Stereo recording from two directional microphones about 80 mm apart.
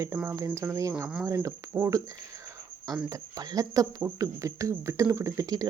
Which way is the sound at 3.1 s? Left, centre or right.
Right.